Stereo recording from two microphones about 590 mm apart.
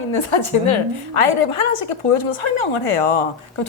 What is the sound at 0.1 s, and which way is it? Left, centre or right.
Speech, left.